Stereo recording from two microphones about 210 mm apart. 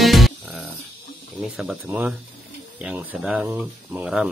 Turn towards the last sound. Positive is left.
turn(degrees=-5)  # may be behind; listen again after turning